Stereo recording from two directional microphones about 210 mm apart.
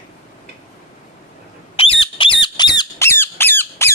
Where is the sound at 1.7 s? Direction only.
25° left (ahead or behind).